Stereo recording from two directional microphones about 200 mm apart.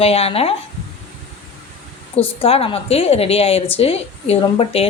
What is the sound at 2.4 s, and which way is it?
A woman's voice, 30° left (ahead or behind).